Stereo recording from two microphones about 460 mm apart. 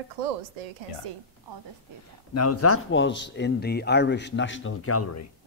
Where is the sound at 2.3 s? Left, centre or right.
Left.